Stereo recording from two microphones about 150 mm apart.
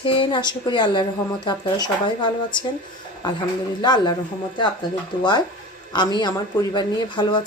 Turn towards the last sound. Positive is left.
turn(degrees=30)  # may be behind; listen again after turning